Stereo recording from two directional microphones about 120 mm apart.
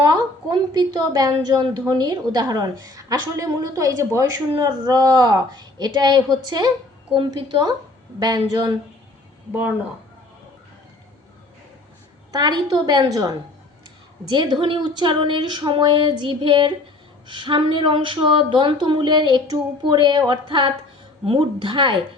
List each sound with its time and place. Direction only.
0.0 s a woman's voice: 35° right (ahead or behind)
8.2 s a woman's voice: 35° right (ahead or behind)
9.5 s speech: 15° right (ahead or behind)
12.3 s a woman's voice: 35° right (ahead or behind)